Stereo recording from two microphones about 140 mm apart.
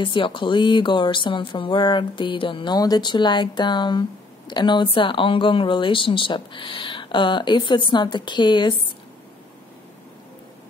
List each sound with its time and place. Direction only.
0.0 s speech: 35° left (ahead or behind)